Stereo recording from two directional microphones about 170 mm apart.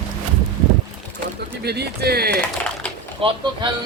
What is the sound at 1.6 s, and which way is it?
Speech, 70° right (ahead or behind).